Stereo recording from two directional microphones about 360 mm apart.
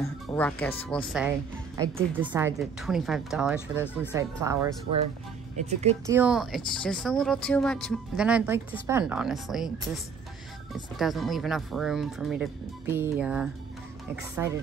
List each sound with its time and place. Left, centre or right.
0.0 s speech: centre
5.8 s speech: centre
6.1 s speech: centre
10.7 s speech: centre